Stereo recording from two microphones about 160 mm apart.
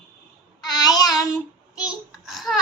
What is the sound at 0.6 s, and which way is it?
Child singing, 25° left (ahead or behind).